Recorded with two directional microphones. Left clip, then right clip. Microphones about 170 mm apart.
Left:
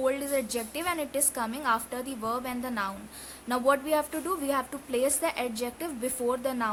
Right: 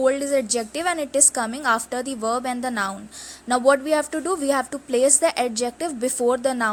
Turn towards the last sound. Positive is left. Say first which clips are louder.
# right 8 dB
turn(degrees=-35)  # may be behind; listen again after turning